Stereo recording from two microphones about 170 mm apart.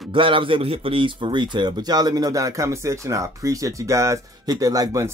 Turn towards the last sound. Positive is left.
turn(degrees=-20)  # may be behind; listen again after turning